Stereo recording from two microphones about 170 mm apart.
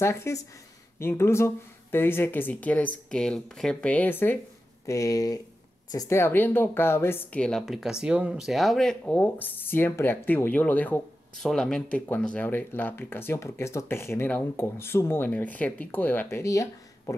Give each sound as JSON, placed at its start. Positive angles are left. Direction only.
{"t": 0.0, "sound": "speech", "side_deg": 15}